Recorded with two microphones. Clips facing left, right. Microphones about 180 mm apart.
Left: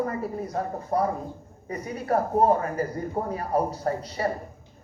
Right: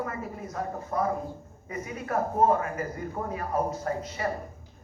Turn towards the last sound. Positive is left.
turn(degrees=35)  # may be behind; listen again after turning